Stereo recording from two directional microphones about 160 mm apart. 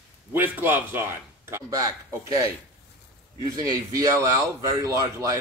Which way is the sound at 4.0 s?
20° right (ahead or behind).